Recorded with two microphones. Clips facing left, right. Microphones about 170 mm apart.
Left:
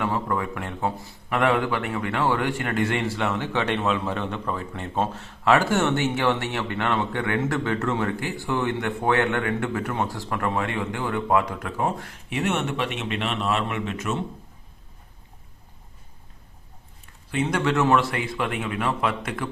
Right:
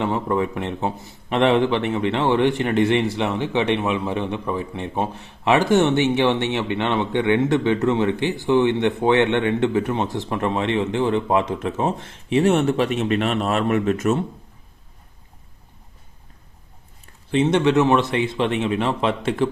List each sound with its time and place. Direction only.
0.0 s a man's voice: 20° right (ahead or behind); by 14.2 s 45° right (ahead or behind)
17.3 s a man's voice: 25° right (ahead or behind)